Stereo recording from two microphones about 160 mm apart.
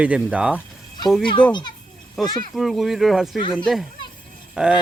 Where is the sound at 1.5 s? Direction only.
30° left (ahead or behind).